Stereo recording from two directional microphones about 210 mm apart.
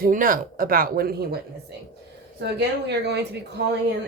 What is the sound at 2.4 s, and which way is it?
A woman's voice, 55° right (ahead or behind).